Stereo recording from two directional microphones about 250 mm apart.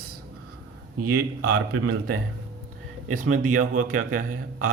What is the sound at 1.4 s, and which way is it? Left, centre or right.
Speech, right.